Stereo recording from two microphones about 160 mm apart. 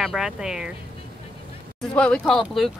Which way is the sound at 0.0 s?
5° right (ahead or behind).